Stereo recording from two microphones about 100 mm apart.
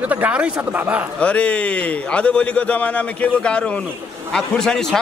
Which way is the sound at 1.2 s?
10° left (ahead or behind).